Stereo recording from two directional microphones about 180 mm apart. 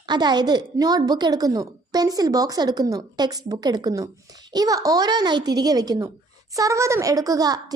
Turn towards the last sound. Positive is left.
turn(degrees=-20)  # may be behind; listen again after turning